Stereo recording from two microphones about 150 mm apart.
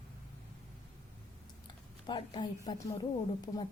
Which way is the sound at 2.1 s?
30° left (ahead or behind).